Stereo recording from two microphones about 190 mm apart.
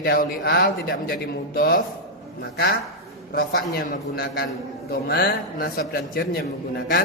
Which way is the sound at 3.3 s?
55° left (ahead or behind).